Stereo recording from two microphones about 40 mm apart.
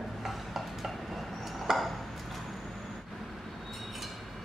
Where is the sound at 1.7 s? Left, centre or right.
Centre.